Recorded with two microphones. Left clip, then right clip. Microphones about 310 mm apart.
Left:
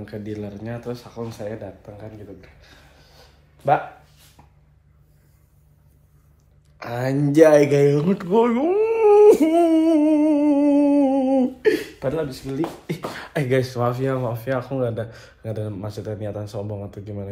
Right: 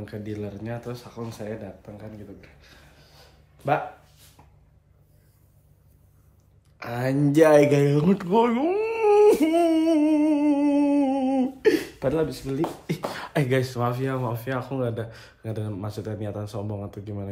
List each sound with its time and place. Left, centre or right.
0.0 s speech: centre
6.8 s speech: centre